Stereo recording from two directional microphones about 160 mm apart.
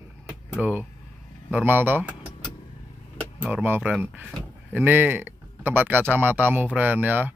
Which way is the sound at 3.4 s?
10° right (ahead or behind).